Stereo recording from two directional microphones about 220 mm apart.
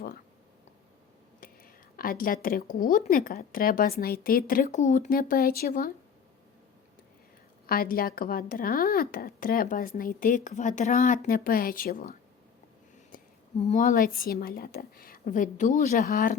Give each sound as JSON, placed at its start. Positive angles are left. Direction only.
{"t": 1.4, "sound": "speech", "side_deg": 40}
{"t": 7.7, "sound": "speech", "side_deg": 40}